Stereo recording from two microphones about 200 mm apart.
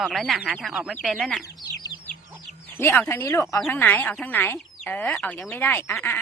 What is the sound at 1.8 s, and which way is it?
Chicken, 20° left (ahead or behind).